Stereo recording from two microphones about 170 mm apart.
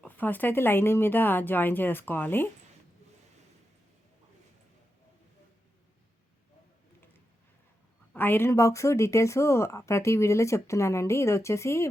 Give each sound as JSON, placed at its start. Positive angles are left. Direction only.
{"t": 0.0, "sound": "speech", "side_deg": 10}
{"t": 8.1, "sound": "speech", "side_deg": 10}